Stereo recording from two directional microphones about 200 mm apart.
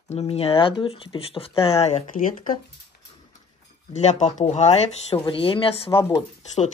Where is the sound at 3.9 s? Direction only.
35° left (ahead or behind).